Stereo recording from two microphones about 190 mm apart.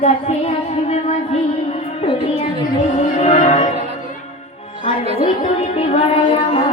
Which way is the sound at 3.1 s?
35° left (ahead or behind).